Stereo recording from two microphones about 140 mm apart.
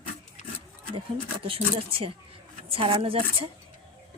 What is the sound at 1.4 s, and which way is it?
Speech, 40° right (ahead or behind).